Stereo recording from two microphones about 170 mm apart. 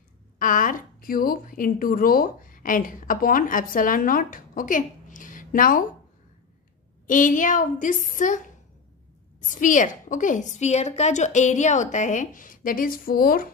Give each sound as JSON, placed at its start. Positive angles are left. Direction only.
{"t": 0.4, "sound": "a woman's voice", "side_deg": 50}
{"t": 7.1, "sound": "a woman's voice", "side_deg": 50}